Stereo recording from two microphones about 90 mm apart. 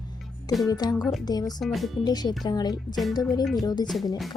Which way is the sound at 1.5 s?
Centre (ahead or behind).